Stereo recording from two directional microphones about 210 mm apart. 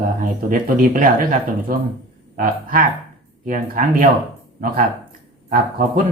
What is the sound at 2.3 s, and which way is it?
Speech, 40° right (ahead or behind).